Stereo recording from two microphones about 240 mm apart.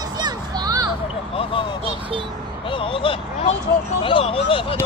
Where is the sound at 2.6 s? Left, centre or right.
Left.